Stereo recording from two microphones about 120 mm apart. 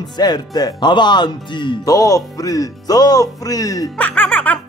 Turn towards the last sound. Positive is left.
turn(degrees=15)  # may be behind; listen again after turning